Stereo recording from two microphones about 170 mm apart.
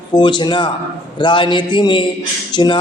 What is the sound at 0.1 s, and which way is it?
A man's voice, 25° left (ahead or behind).